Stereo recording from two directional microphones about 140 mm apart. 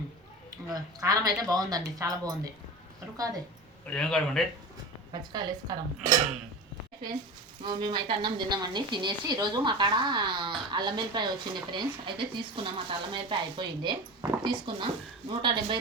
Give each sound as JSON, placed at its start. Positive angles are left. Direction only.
{"t": 0.7, "sound": "speech", "side_deg": -25}
{"t": 3.8, "sound": "speech", "side_deg": 5}
{"t": 5.3, "sound": "speech", "side_deg": -30}
{"t": 7.6, "sound": "speech", "side_deg": -35}